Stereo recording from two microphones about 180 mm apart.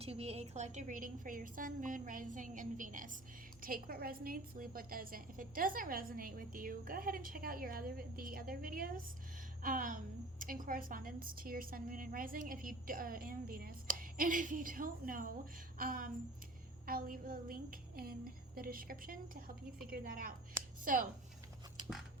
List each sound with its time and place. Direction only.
0.0 s a woman's voice: 35° right (ahead or behind)
3.6 s a woman's voice: 55° right (ahead or behind)